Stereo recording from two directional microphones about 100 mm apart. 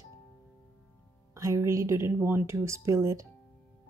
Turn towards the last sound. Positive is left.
turn(degrees=-30)  # may be behind; listen again after turning